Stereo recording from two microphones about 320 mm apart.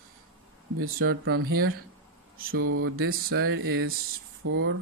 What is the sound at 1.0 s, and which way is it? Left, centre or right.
Speech, right.